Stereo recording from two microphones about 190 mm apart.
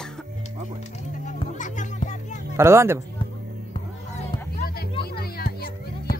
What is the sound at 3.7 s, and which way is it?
Music, 35° left (ahead or behind).